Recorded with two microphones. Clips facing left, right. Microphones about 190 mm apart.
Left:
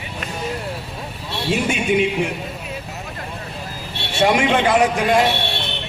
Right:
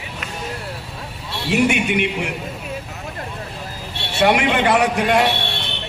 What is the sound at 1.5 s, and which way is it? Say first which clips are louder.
Speech: right 2 dB; 70° right (ahead or behind).